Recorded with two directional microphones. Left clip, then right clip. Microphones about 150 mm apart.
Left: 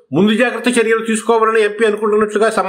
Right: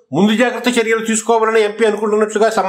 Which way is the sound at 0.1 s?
Centre (ahead or behind).